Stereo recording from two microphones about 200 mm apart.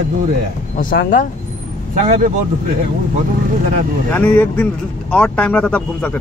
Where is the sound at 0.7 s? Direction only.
45° left (ahead or behind).